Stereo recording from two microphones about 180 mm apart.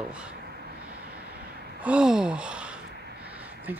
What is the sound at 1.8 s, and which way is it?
Gasp, 5° right (ahead or behind).